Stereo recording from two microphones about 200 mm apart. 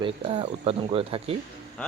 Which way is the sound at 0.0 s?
25° right (ahead or behind).